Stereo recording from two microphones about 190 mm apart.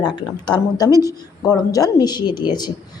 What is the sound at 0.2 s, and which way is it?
A woman's voice, 20° left (ahead or behind).